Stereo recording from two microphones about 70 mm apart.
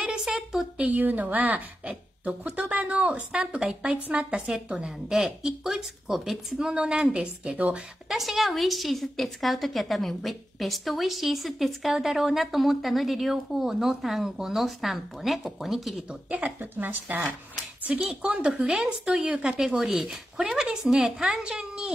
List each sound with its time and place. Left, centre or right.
0.0 s a sound: centre
0.7 s a woman's voice: right
8.1 s a woman's voice: centre
16.1 s a woman's voice: right